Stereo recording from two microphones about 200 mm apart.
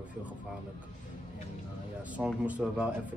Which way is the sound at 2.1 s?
5° right (ahead or behind).